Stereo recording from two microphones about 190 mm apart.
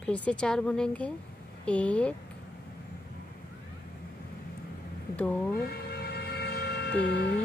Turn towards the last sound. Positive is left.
turn(degrees=60)  # may be behind; listen again after turning